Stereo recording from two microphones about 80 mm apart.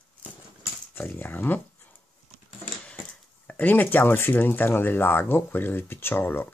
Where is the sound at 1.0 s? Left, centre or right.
Left.